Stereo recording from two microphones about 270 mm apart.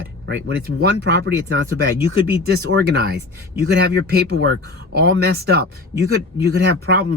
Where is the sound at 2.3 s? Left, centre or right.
Right.